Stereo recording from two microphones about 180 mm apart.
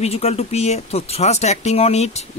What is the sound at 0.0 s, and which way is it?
Speech, 35° left (ahead or behind).